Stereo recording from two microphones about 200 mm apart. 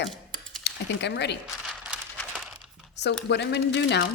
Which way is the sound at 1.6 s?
5° right (ahead or behind).